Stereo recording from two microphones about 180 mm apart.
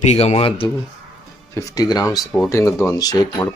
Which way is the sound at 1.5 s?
15° left (ahead or behind).